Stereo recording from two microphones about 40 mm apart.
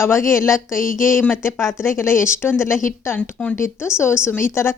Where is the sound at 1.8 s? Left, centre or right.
Left.